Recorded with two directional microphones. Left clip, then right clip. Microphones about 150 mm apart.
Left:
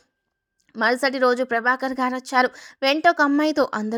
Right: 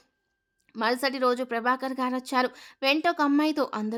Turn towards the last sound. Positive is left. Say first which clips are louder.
# left 6 dB
turn(degrees=25)  # may be behind; listen again after turning